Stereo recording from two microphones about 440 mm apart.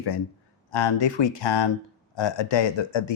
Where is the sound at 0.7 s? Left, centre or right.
Left.